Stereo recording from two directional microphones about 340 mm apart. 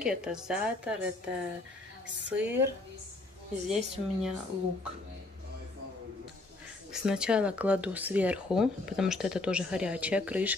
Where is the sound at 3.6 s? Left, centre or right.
Centre.